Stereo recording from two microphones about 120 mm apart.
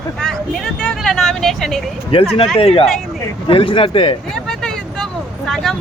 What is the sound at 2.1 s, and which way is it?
A man's voice, 45° left (ahead or behind).